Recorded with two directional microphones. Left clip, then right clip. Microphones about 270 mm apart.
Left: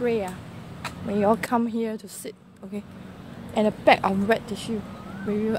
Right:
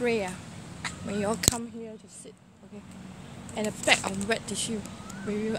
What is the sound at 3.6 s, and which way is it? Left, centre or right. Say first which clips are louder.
Speech: left 6 dB; left.